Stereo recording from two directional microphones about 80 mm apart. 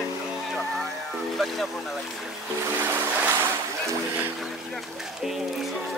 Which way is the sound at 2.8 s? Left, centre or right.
Right.